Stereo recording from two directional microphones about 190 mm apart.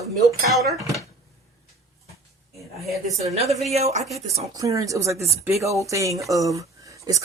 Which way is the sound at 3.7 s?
35° right (ahead or behind).